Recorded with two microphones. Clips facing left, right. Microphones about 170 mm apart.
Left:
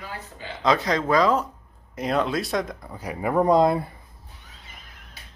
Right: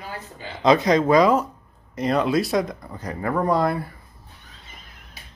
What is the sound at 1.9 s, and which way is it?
Speech, centre (ahead or behind).